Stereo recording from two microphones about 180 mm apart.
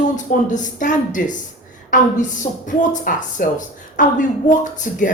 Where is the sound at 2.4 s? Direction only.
45° left (ahead or behind).